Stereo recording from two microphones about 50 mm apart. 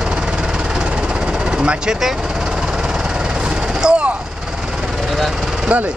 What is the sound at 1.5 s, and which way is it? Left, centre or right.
Speech, right.